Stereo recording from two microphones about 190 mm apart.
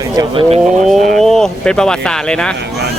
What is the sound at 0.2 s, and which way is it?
Speech, 30° right (ahead or behind).